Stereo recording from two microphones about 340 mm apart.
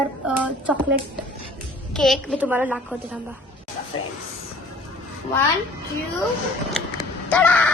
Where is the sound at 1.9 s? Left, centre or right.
Centre.